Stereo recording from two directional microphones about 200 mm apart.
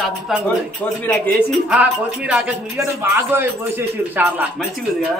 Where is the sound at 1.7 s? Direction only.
5° right (ahead or behind).